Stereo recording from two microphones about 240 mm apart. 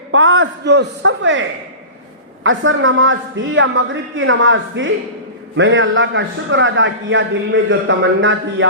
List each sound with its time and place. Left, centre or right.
0.1 s a man's voice: right